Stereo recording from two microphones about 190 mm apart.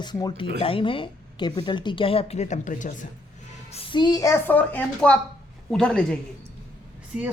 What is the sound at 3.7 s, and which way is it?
A man's voice, 25° left (ahead or behind).